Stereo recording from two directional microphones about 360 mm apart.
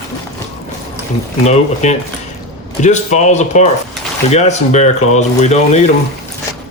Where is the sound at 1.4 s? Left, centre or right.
Centre.